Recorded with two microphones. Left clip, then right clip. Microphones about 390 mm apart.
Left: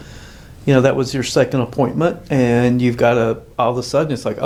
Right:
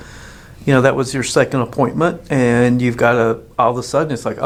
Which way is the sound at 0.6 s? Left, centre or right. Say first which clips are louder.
Right 1 dB; centre.